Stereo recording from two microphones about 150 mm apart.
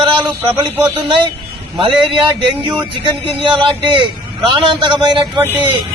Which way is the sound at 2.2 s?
30° right (ahead or behind).